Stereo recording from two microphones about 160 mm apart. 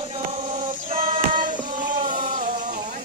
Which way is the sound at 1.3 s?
55° right (ahead or behind).